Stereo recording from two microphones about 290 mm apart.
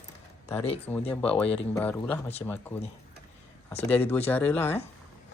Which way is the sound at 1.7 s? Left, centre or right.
Centre.